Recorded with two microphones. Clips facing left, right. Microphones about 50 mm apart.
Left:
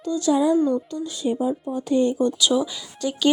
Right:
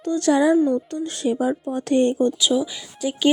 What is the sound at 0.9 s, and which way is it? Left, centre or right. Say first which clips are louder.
Speech: right 2 dB; right.